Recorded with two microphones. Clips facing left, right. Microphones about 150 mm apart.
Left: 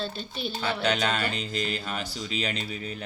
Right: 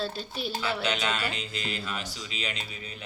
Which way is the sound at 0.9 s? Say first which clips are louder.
Left 7 dB; 45° left (ahead or behind).